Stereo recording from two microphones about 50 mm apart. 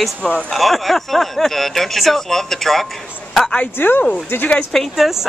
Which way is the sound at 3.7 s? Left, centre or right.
Left.